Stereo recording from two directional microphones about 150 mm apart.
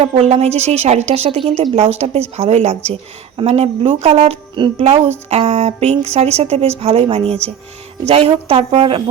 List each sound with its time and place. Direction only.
0.0 s a woman's voice: 45° right (ahead or behind)